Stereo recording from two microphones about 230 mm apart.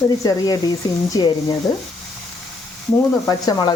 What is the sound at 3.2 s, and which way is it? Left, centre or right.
Speech, centre.